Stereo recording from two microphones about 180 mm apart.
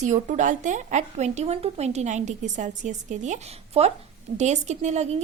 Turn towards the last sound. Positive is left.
turn(degrees=-40)  # may be behind; listen again after turning